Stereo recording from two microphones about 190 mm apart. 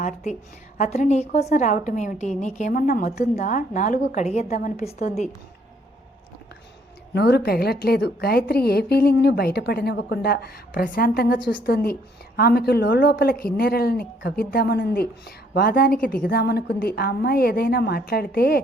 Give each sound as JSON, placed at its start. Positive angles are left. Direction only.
{"t": 0.8, "sound": "a woman's voice", "side_deg": 40}
{"t": 3.3, "sound": "a woman's voice", "side_deg": 40}
{"t": 7.1, "sound": "a woman's voice", "side_deg": 60}